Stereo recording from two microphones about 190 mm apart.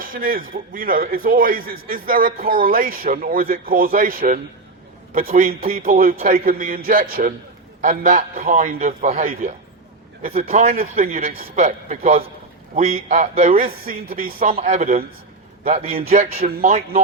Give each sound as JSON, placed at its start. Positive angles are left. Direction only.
{"t": 0.0, "sound": "a man's voice", "side_deg": -50}
{"t": 14.4, "sound": "a man's voice", "side_deg": -35}